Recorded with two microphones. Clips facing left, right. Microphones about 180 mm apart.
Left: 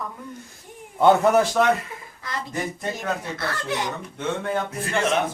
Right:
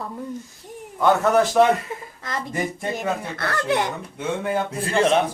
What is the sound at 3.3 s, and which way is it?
Speech, 55° right (ahead or behind).